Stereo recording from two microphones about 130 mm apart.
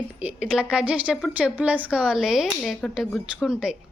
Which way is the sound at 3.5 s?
5° right (ahead or behind).